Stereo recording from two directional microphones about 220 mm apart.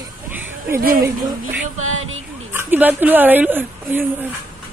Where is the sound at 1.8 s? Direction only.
70° right (ahead or behind).